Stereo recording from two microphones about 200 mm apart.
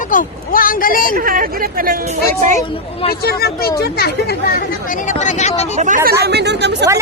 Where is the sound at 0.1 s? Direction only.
45° left (ahead or behind).